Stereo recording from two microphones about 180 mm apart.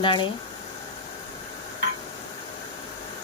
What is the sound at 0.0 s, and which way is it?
Speech, 25° left (ahead or behind).